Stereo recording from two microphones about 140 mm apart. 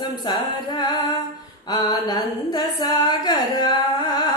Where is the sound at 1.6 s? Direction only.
30° left (ahead or behind).